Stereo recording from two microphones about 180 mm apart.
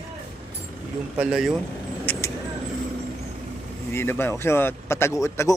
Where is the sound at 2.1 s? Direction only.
15° left (ahead or behind).